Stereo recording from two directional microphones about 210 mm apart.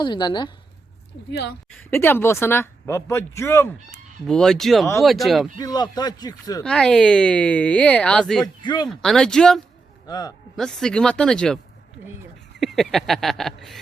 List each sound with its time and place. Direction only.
0.0 s speech: 20° left (ahead or behind)
1.3 s speech: 50° left (ahead or behind)
1.8 s speech: 10° left (ahead or behind)
4.3 s speech: centre (ahead or behind)
5.5 s speech: 20° left (ahead or behind)
6.6 s speech: 5° left (ahead or behind)
8.6 s speech: 20° left (ahead or behind)
8.9 s speech: 5° left (ahead or behind)
10.1 s speech: 20° left (ahead or behind)
10.6 s speech: 5° left (ahead or behind)